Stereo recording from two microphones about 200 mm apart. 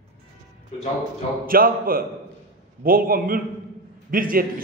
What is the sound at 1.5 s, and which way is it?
A man's voice, 45° right (ahead or behind).